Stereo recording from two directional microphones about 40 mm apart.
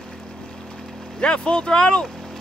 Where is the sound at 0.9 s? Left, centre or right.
Centre.